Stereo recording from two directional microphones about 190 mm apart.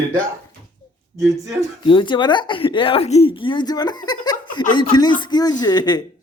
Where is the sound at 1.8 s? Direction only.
25° left (ahead or behind).